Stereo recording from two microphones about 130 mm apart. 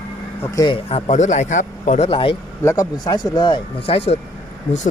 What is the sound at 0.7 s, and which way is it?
Speech, 50° left (ahead or behind).